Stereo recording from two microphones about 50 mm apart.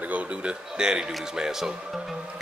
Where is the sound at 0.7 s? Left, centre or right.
Centre.